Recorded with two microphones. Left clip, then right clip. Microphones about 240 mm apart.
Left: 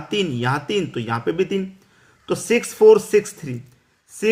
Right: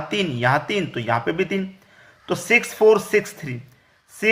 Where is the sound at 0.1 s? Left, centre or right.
Centre.